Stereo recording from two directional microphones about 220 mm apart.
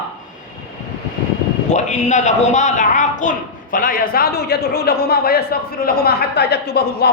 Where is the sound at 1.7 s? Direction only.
35° left (ahead or behind).